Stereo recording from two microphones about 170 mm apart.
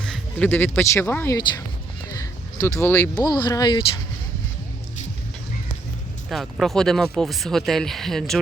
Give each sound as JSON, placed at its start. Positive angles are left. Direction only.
{"t": 0.0, "sound": "speech", "side_deg": 5}
{"t": 6.2, "sound": "speech", "side_deg": 0}